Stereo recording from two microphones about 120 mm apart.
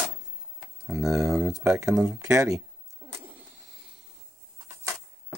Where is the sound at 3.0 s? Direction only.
35° right (ahead or behind).